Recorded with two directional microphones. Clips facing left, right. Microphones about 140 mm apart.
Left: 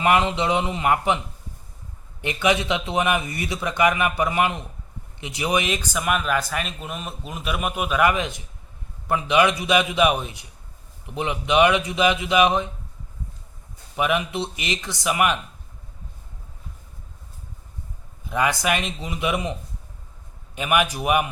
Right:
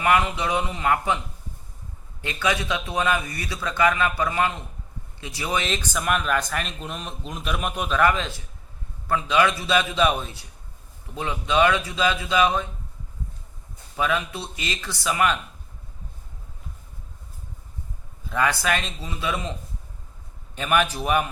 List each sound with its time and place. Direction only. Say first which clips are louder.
0.0 s a man's voice: left 2 dB; 20° left (ahead or behind)
2.2 s a man's voice: left 4 dB; 20° left (ahead or behind)
13.9 s speech: left 2 dB; 15° left (ahead or behind)
18.3 s speech: left 1 dB; 15° left (ahead or behind)
20.6 s speech: left 1 dB; 10° left (ahead or behind)